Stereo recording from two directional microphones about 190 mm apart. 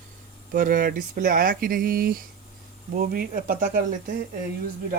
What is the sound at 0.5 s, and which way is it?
Speech, 45° right (ahead or behind).